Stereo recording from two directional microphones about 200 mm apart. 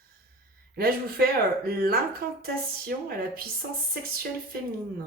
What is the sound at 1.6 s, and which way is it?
Speech, 50° right (ahead or behind).